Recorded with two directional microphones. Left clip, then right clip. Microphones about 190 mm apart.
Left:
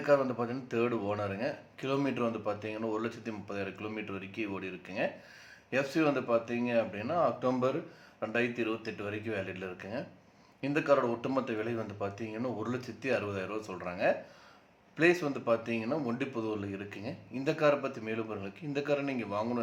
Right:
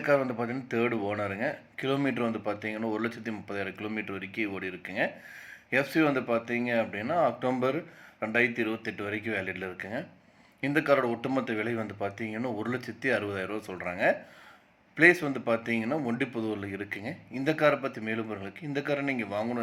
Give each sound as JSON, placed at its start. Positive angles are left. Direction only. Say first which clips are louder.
{"t": 0.0, "sound": "speech", "louder": "right 1 dB", "side_deg": -10}